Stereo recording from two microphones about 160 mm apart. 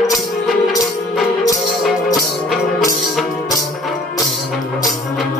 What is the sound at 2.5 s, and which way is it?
Music, centre (ahead or behind).